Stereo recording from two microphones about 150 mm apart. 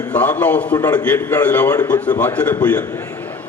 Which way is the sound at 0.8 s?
25° left (ahead or behind).